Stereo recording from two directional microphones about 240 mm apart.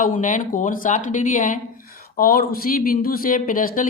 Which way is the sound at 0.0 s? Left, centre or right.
Left.